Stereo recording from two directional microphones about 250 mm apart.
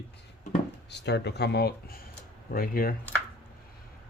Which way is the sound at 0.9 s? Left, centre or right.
Left.